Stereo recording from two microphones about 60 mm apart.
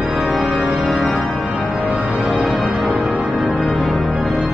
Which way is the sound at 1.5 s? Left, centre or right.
Right.